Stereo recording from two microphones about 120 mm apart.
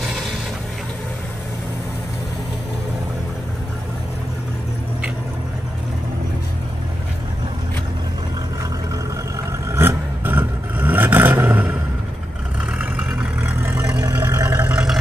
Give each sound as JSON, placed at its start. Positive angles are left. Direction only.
{"t": 9.7, "sound": "vehicle", "side_deg": -20}
{"t": 12.7, "sound": "vehicle", "side_deg": -10}